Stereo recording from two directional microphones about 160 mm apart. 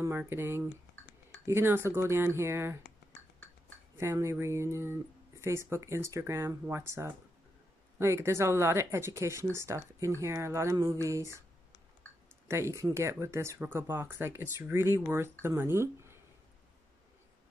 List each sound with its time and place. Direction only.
0.0 s speech: 15° right (ahead or behind)
4.0 s speech: 15° right (ahead or behind)
12.4 s speech: 15° right (ahead or behind)